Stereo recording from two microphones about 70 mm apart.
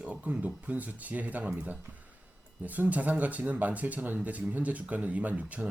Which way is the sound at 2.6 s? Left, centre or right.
Right.